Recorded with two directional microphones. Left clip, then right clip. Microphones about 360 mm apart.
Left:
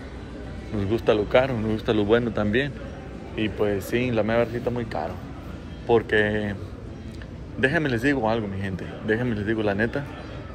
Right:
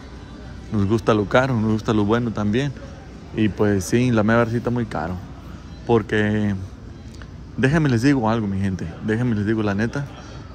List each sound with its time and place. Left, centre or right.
0.7 s a man's voice: right
7.6 s a man's voice: right